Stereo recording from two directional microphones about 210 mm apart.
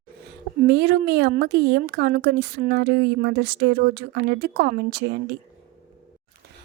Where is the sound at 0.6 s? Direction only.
50° right (ahead or behind).